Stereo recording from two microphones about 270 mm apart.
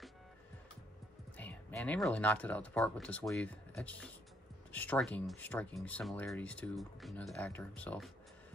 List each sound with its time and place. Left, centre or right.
1.3 s speech: centre